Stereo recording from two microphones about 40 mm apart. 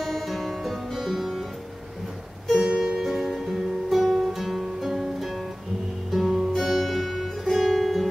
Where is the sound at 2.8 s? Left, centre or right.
Centre.